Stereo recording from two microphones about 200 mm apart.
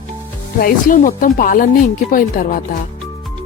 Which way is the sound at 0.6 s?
45° left (ahead or behind).